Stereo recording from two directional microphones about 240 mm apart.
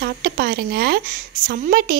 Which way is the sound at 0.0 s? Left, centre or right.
Right.